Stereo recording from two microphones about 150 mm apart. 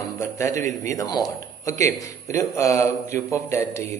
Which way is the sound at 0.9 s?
25° left (ahead or behind).